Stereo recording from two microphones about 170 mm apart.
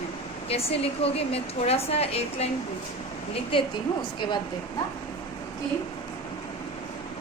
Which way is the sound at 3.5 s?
30° left (ahead or behind).